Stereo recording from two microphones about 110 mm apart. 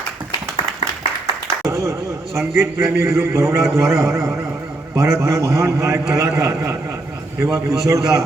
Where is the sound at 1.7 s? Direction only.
25° right (ahead or behind).